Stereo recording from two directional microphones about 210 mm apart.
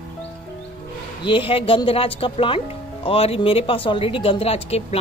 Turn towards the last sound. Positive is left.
turn(degrees=30)  # may be behind; listen again after turning